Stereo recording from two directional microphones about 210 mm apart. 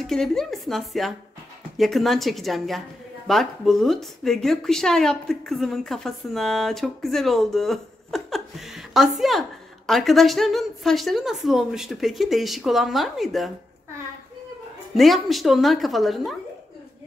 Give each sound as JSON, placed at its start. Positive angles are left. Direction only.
{"t": 0.0, "sound": "speech", "side_deg": 0}
{"t": 15.0, "sound": "speech", "side_deg": 0}